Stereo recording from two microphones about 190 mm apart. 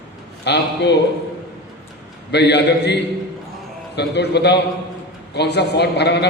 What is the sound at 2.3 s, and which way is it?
A man's voice, 65° left (ahead or behind).